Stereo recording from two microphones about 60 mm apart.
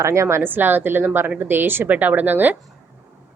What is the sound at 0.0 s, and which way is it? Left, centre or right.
Speech, right.